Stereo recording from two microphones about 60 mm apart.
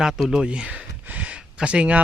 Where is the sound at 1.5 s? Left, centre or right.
Centre.